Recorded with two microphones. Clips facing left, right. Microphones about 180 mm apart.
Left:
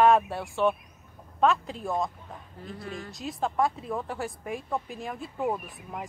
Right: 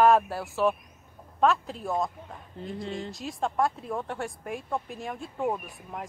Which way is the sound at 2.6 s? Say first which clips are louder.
Right 5 dB; 25° right (ahead or behind).